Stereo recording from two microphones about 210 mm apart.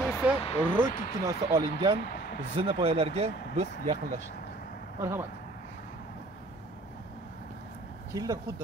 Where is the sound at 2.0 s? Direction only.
50° left (ahead or behind).